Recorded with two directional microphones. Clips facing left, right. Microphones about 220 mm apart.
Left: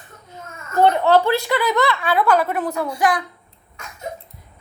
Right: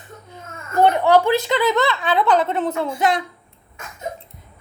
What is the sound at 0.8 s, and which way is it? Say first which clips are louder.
Speech: even; 15° right (ahead or behind).